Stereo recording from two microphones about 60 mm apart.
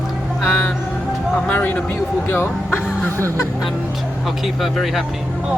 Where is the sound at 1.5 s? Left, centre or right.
Left.